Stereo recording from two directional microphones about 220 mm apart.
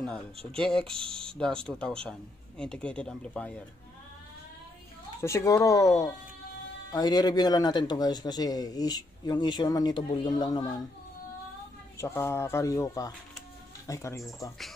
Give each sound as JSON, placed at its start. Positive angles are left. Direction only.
{"t": 0.6, "sound": "speech", "side_deg": 0}
{"t": 5.2, "sound": "speech", "side_deg": 15}
{"t": 12.0, "sound": "speech", "side_deg": 10}